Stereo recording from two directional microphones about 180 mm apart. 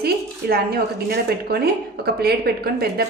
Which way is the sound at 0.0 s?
60° right (ahead or behind).